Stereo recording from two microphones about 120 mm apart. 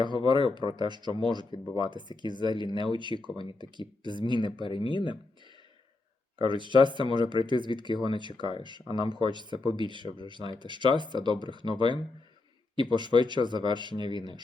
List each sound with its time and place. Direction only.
0.3 s speech: 40° right (ahead or behind)
4.6 s speech: 45° left (ahead or behind)
6.4 s speech: 40° right (ahead or behind)